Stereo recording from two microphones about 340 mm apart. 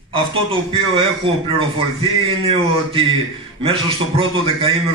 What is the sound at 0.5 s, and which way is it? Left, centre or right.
A man's voice, centre.